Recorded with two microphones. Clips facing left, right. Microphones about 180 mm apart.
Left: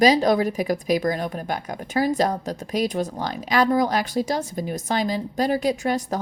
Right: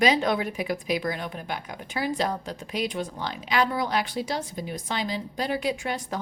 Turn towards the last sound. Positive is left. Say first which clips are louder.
# left 6 dB
turn(degrees=40)  # may be behind; listen again after turning